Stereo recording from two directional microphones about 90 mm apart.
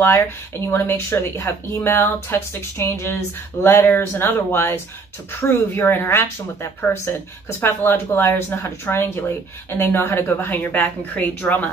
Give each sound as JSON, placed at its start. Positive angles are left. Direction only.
{"t": 0.7, "sound": "a woman's voice", "side_deg": 25}